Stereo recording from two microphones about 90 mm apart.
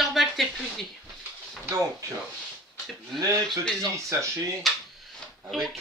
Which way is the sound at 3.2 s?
40° right (ahead or behind).